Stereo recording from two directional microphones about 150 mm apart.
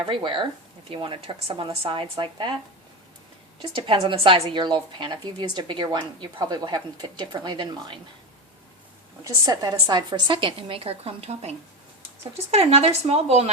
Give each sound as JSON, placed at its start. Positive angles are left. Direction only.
{"t": 0.0, "sound": "a woman's voice", "side_deg": -35}
{"t": 3.6, "sound": "a woman's voice", "side_deg": -35}
{"t": 9.2, "sound": "a woman's voice", "side_deg": -25}